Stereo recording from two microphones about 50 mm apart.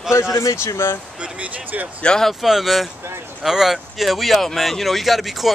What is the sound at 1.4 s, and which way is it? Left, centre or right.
Speech, right.